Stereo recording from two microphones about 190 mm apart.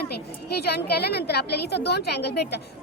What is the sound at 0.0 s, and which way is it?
A woman's voice, 55° left (ahead or behind).